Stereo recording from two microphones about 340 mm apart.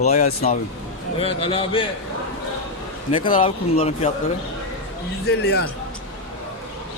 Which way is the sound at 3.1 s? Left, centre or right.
Centre.